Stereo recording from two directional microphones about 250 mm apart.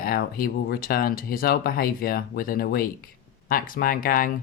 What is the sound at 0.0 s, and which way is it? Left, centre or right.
Speech, left.